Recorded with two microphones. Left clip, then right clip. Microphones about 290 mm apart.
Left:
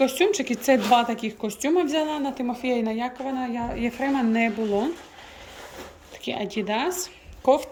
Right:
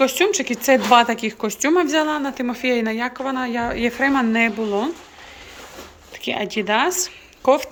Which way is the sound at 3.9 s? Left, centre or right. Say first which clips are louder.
Right 7 dB; right.